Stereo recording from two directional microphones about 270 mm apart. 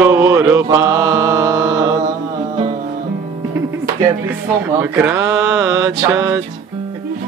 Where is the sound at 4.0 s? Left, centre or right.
Centre.